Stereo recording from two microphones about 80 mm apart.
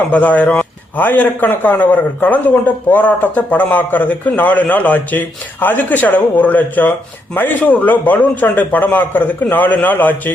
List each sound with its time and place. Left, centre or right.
0.1 s a man's voice: centre